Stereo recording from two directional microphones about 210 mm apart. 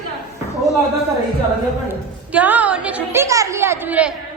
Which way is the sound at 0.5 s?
15° left (ahead or behind).